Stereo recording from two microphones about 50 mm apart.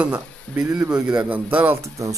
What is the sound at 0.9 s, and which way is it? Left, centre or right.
Speech, right.